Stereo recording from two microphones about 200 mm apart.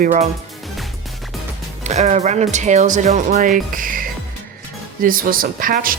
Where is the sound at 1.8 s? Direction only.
35° right (ahead or behind).